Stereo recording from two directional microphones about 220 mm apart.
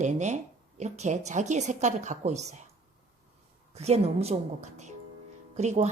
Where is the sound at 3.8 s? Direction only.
30° right (ahead or behind).